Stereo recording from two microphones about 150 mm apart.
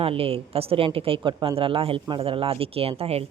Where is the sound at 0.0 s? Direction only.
40° right (ahead or behind).